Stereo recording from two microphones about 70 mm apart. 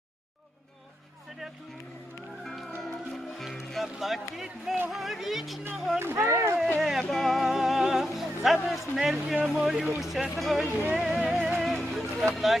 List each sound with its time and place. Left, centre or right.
2.4 s music: centre
3.3 s speech: centre
6.0 s speech: right
6.7 s speech: centre
10.7 s music: right
10.9 s music: centre